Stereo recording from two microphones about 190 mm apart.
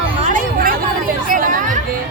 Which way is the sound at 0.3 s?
50° right (ahead or behind).